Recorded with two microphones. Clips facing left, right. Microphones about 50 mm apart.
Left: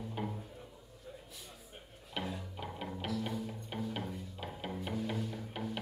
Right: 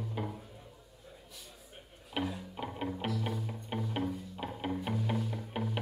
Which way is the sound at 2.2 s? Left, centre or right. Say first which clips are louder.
Right 4 dB; centre.